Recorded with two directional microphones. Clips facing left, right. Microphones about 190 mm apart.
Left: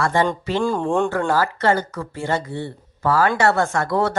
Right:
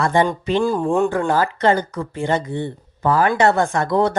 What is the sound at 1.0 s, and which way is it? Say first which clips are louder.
Speech: right 2 dB; 20° right (ahead or behind).